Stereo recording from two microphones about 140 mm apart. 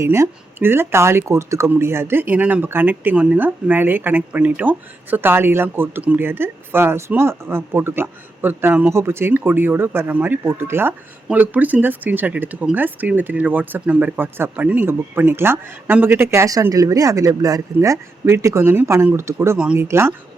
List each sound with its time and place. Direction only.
0.0 s speech: 20° right (ahead or behind)